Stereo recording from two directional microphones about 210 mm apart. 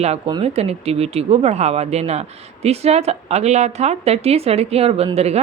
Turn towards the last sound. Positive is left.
turn(degrees=-30)  # may be behind; listen again after turning